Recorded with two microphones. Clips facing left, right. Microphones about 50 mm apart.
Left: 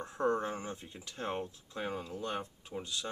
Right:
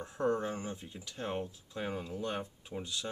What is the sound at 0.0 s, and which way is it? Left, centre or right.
Speech, centre.